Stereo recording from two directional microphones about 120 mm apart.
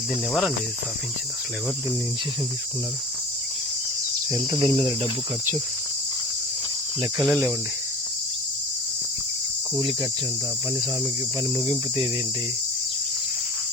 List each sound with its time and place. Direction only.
4.3 s cricket: 40° right (ahead or behind)
4.7 s cricket: 50° right (ahead or behind)
7.3 s cricket: 15° right (ahead or behind)
9.7 s cricket: 30° right (ahead or behind)